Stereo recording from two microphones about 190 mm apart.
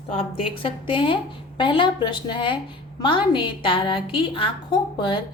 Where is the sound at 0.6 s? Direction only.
25° left (ahead or behind).